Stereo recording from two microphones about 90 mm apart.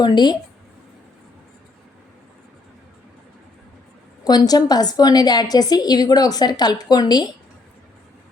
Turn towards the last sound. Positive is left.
turn(degrees=50)  # may be behind; listen again after turning